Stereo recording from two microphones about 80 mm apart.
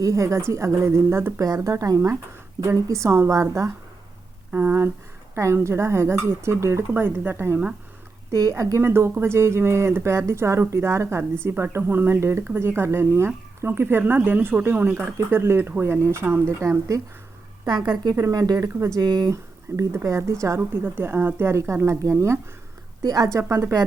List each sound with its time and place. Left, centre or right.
0.0 s speech: right
1.4 s speech: right
4.5 s speech: right
8.3 s speech: right
8.9 s speech: right
17.7 s speech: right
18.1 s speech: right
18.9 s speech: right
19.3 s speech: right
20.6 s speech: right
23.4 s speech: right